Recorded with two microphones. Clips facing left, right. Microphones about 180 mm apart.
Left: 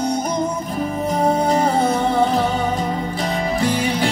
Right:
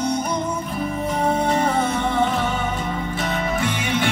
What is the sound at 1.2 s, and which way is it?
Music, 35° left (ahead or behind).